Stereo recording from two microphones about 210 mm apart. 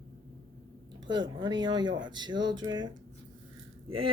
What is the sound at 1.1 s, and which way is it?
Speech, 20° right (ahead or behind).